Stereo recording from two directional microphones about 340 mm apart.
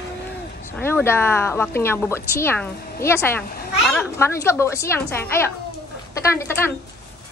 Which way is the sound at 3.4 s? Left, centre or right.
Left.